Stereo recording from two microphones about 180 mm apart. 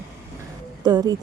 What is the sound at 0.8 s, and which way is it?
Speech, 20° right (ahead or behind).